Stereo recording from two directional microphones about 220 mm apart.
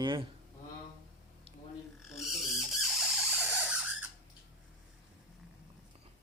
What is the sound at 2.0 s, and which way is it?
Squawk, centre (ahead or behind).